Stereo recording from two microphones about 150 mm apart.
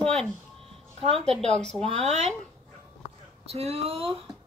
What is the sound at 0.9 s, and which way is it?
Speech, 40° right (ahead or behind).